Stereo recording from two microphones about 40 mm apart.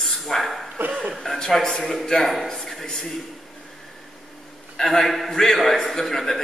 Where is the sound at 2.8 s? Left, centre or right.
Centre.